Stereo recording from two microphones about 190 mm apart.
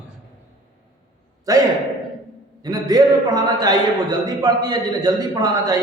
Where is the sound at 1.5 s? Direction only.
20° right (ahead or behind).